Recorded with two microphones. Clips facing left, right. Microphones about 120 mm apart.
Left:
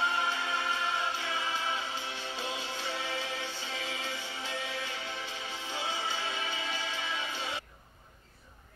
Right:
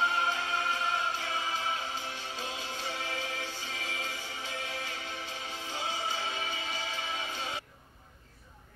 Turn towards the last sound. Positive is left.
turn(degrees=-45)  # may be behind; listen again after turning